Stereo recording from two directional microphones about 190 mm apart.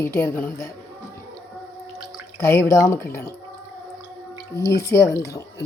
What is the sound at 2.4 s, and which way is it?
Speech, 15° left (ahead or behind).